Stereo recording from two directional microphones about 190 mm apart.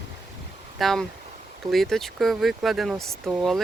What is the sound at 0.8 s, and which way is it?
Speech, centre (ahead or behind).